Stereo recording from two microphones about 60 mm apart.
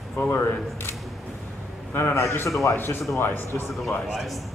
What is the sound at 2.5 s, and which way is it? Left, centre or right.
Speech, left.